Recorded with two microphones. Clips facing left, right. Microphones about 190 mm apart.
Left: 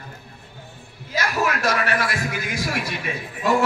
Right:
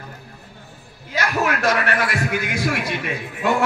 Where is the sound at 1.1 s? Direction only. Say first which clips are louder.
Right 2 dB; 60° right (ahead or behind).